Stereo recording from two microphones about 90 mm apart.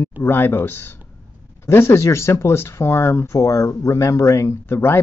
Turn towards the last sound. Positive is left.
turn(degrees=25)  # may be behind; listen again after turning